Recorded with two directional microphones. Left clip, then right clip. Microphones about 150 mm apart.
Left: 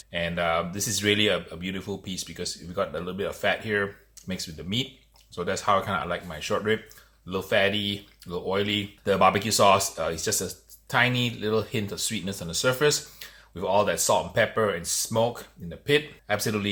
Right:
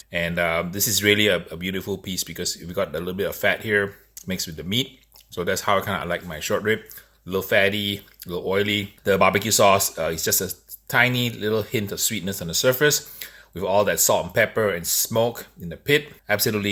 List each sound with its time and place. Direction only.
0.1 s speech: 65° right (ahead or behind)